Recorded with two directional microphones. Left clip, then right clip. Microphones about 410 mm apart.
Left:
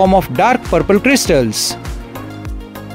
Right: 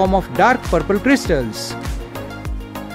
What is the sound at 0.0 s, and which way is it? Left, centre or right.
Speech, centre.